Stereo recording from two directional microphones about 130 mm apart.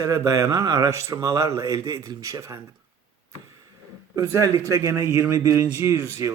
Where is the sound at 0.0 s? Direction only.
25° right (ahead or behind).